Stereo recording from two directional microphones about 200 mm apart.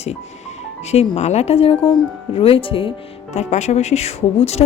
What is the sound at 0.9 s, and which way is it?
Speech, 35° left (ahead or behind).